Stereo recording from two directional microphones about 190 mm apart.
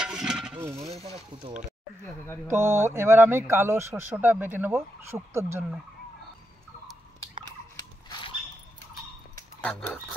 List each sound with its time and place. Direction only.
0.0 s stir: 5° right (ahead or behind)
2.4 s speech: 15° right (ahead or behind)
7.4 s a sound: 20° left (ahead or behind)
9.6 s speech: 5° left (ahead or behind)